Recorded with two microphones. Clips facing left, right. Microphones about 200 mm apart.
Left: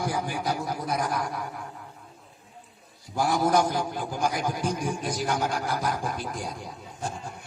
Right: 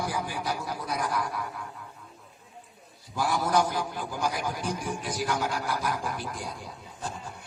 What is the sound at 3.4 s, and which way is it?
A man's voice, 20° left (ahead or behind).